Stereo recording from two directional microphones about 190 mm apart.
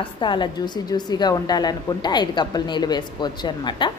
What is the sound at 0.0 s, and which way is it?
A woman's voice, 25° left (ahead or behind).